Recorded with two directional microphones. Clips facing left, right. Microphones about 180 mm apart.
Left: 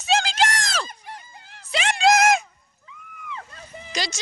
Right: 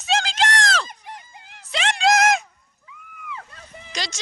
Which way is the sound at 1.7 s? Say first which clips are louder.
Left 1 dB; 5° left (ahead or behind).